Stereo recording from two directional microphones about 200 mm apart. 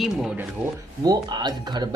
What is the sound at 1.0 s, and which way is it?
Speech, 20° right (ahead or behind).